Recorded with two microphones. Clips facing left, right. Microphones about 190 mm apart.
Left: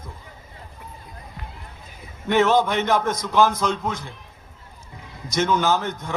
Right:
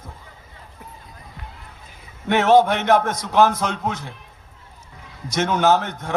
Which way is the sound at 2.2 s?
65° right (ahead or behind).